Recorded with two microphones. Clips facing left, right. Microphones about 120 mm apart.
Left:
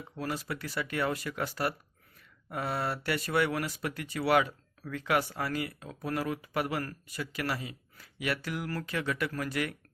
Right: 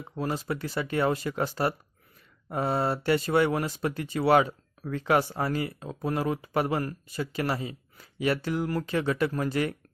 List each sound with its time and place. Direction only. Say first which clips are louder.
0.2 s speech: right 5 dB; 25° right (ahead or behind)